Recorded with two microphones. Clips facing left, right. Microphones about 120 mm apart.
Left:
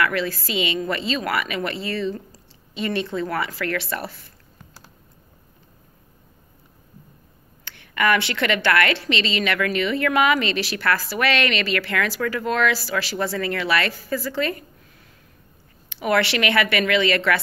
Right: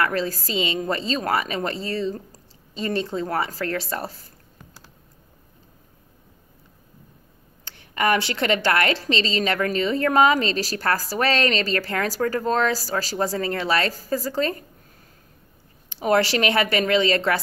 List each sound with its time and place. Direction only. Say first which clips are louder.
0.0 s a woman's voice: left 1 dB; 35° right (ahead or behind)
3.1 s a woman's voice: even; 35° right (ahead or behind)
7.8 s a sound: left 1 dB; 35° right (ahead or behind)
8.4 s a woman's voice: left 1 dB; 35° right (ahead or behind)
16.3 s a woman's voice: even; 35° right (ahead or behind)